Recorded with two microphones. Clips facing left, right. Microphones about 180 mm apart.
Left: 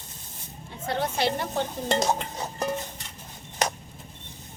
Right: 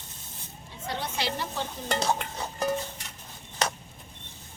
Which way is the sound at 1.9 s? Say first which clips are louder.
Left 2 dB; 25° left (ahead or behind).